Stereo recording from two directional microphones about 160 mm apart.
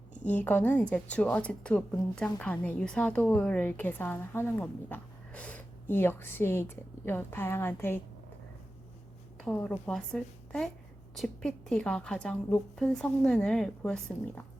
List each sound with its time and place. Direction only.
0.3 s a woman's voice: 10° left (ahead or behind)
9.4 s a woman's voice: 5° left (ahead or behind)